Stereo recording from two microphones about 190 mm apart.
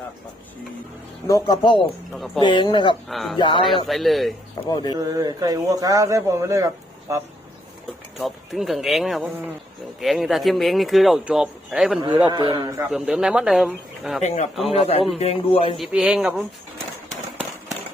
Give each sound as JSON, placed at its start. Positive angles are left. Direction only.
{"t": 1.3, "sound": "speech", "side_deg": 20}
{"t": 2.1, "sound": "speech", "side_deg": 0}
{"t": 2.4, "sound": "speech", "side_deg": 25}
{"t": 3.1, "sound": "speech", "side_deg": 0}
{"t": 3.3, "sound": "speech", "side_deg": 25}
{"t": 3.8, "sound": "speech", "side_deg": 0}
{"t": 4.7, "sound": "speech", "side_deg": 20}
{"t": 4.9, "sound": "a man's voice", "side_deg": -20}
{"t": 8.2, "sound": "speech", "side_deg": 0}
{"t": 12.0, "sound": "a man's voice", "side_deg": -25}
{"t": 12.9, "sound": "speech", "side_deg": -5}
{"t": 14.2, "sound": "a man's voice", "side_deg": 35}
{"t": 15.8, "sound": "speech", "side_deg": -5}